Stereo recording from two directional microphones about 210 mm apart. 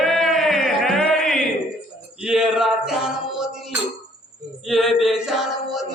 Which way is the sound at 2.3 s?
5° right (ahead or behind).